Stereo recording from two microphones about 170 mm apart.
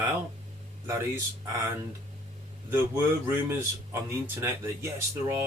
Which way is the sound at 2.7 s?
15° right (ahead or behind).